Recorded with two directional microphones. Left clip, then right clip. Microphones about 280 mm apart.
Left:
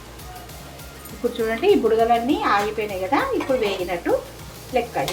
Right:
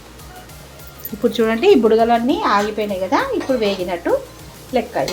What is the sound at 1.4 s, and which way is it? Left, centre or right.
A woman's voice, right.